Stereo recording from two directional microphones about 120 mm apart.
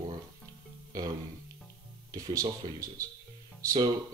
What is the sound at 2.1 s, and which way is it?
Speech, 30° right (ahead or behind).